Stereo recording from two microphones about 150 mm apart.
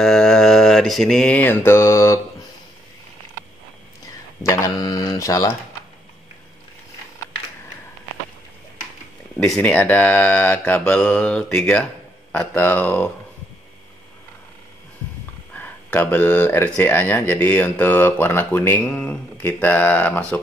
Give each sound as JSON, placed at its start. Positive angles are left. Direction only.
{"t": 0.0, "sound": "mantra", "side_deg": 5}
{"t": 4.4, "sound": "a sound", "side_deg": 20}
{"t": 9.4, "sound": "speech", "side_deg": 10}
{"t": 15.5, "sound": "speech", "side_deg": 10}